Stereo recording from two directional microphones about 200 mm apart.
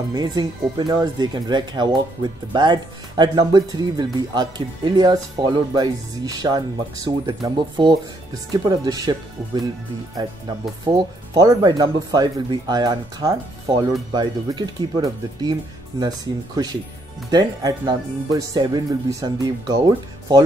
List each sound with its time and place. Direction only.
0.1 s speech: 20° right (ahead or behind)
10.9 s speech: 20° right (ahead or behind)
17.3 s speech: 20° right (ahead or behind)